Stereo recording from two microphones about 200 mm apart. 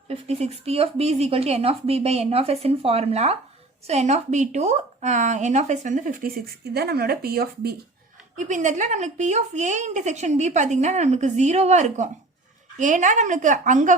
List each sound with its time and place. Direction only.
0.1 s speech: 30° right (ahead or behind); by 7.8 s 50° right (ahead or behind)
8.4 s speech: 40° right (ahead or behind)